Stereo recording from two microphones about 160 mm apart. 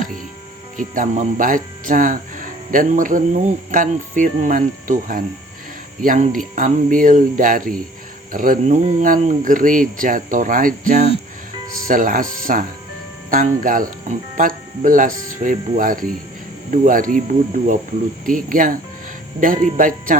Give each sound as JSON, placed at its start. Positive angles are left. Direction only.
{"t": 0.8, "sound": "speech", "side_deg": -55}
{"t": 10.8, "sound": "speech", "side_deg": -45}
{"t": 11.9, "sound": "speech", "side_deg": -55}